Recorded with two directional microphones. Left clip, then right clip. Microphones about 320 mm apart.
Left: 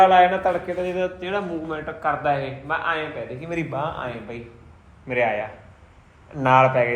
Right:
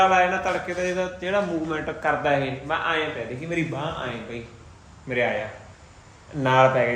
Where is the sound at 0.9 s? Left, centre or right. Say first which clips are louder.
Right 1 dB; right.